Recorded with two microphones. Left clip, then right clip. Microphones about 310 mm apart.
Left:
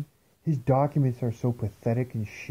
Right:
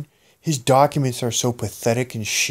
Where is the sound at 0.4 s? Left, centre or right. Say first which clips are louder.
Right 10 dB; centre.